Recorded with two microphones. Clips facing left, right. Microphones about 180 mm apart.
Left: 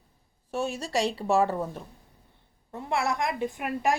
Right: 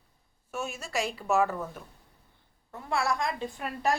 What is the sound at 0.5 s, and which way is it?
A woman's voice, 35° left (ahead or behind).